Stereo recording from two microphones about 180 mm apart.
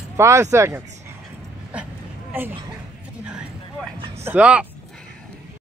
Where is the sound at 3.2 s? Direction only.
5° right (ahead or behind).